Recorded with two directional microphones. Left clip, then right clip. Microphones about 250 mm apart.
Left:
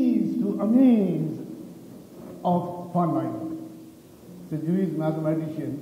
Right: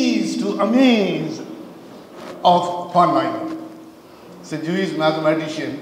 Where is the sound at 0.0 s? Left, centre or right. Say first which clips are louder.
Right 5 dB; centre.